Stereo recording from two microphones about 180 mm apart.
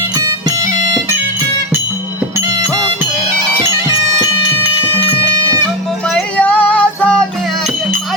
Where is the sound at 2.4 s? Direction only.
20° right (ahead or behind).